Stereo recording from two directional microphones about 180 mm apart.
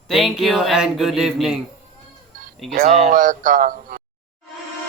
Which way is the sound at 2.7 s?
45° right (ahead or behind).